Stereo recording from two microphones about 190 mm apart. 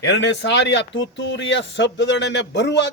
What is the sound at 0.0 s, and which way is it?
A man's voice, 65° left (ahead or behind).